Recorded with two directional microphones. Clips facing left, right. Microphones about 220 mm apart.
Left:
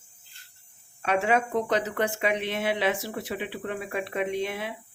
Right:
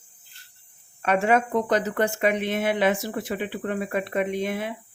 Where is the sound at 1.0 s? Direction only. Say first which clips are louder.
Right 3 dB; 50° right (ahead or behind).